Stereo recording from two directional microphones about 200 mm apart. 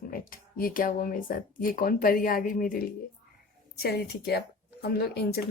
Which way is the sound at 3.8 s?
50° left (ahead or behind).